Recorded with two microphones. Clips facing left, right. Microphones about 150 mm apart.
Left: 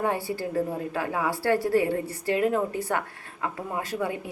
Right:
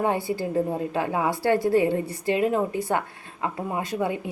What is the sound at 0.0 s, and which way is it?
A woman's voice, 20° right (ahead or behind).